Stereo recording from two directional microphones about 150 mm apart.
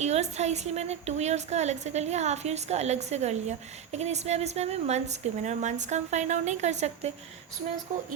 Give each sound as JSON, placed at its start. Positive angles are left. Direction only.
{"t": 0.0, "sound": "a woman's voice", "side_deg": -50}